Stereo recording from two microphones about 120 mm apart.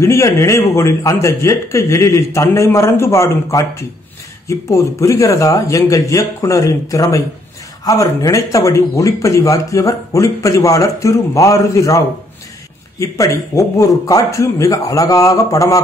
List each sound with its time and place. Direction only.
0.0 s speech: 25° left (ahead or behind)
13.0 s speech: 25° left (ahead or behind)